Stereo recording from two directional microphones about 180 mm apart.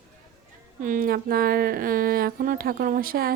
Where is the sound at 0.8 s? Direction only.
50° right (ahead or behind).